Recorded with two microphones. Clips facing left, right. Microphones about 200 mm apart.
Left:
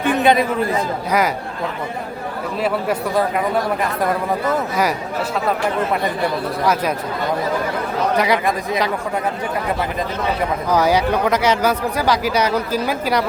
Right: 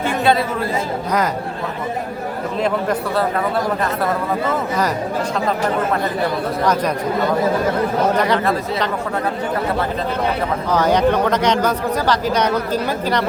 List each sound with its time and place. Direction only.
0.0 s chatter: 15° left (ahead or behind)
8.2 s speech: 10° left (ahead or behind)
10.7 s speech: 10° left (ahead or behind)